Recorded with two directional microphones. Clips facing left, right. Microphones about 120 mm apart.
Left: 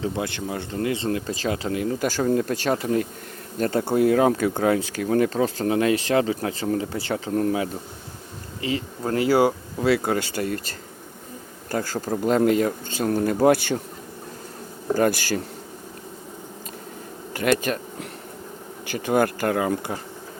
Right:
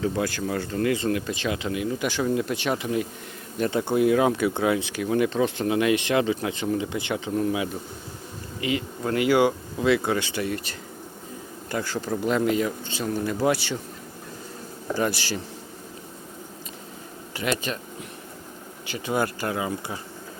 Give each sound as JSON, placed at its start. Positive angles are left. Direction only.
{"t": 0.0, "sound": "speech", "side_deg": 25}
{"t": 14.9, "sound": "speech", "side_deg": 50}
{"t": 17.3, "sound": "speech", "side_deg": 50}
{"t": 18.9, "sound": "speech", "side_deg": 50}